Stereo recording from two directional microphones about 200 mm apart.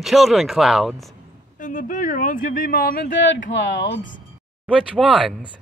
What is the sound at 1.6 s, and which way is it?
Speech, 40° left (ahead or behind).